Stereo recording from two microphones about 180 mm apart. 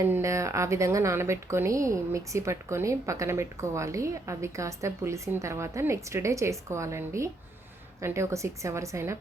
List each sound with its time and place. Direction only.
0.0 s a woman's voice: 15° right (ahead or behind)